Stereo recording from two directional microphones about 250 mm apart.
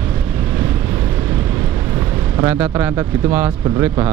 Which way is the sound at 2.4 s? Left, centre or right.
Centre.